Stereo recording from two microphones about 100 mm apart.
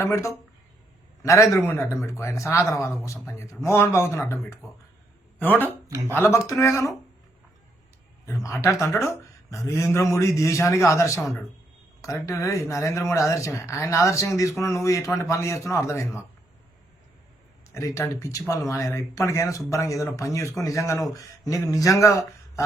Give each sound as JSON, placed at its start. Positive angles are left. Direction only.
{"t": 0.0, "sound": "a man's voice", "side_deg": 30}
{"t": 5.4, "sound": "speech", "side_deg": 15}
{"t": 5.9, "sound": "speech", "side_deg": -30}
{"t": 6.1, "sound": "a man's voice", "side_deg": 30}
{"t": 8.4, "sound": "speech", "side_deg": 30}
{"t": 17.7, "sound": "speech", "side_deg": 30}